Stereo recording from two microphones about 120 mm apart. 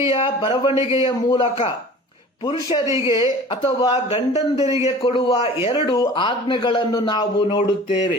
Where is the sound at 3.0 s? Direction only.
40° left (ahead or behind).